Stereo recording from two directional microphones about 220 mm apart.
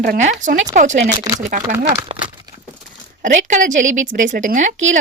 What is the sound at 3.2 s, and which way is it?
A woman's voice, 35° right (ahead or behind).